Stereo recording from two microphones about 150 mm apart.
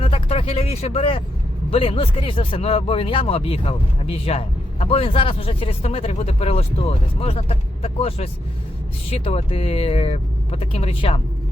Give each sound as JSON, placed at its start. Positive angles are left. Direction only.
{"t": 0.0, "sound": "speech", "side_deg": 40}